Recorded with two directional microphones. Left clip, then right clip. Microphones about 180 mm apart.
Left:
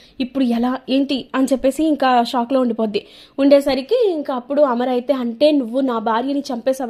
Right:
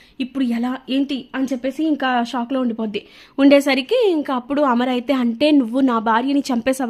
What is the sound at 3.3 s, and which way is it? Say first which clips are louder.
A woman's voice: even; 20° right (ahead or behind).